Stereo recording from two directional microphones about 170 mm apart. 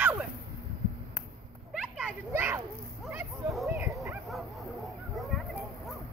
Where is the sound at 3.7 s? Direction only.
15° right (ahead or behind).